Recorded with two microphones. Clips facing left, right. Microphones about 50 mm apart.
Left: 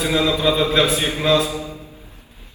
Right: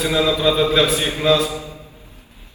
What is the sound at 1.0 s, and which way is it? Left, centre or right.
Speech, left.